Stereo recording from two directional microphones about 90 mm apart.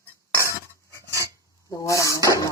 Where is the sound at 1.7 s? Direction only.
40° left (ahead or behind).